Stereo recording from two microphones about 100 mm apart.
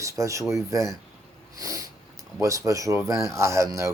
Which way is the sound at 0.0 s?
30° right (ahead or behind).